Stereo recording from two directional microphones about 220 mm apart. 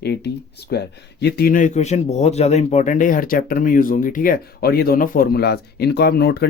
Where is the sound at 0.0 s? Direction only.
50° left (ahead or behind).